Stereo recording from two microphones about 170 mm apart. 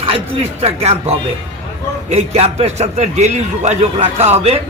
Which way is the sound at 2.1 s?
40° right (ahead or behind).